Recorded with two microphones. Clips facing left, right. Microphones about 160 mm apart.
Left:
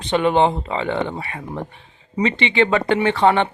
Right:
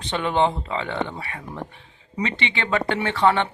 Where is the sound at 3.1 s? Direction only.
60° left (ahead or behind).